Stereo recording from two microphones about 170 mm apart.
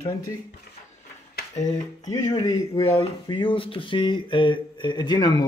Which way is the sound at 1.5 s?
45° left (ahead or behind).